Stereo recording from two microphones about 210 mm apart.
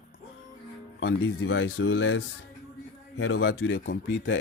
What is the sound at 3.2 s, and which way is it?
Speech, 75° left (ahead or behind).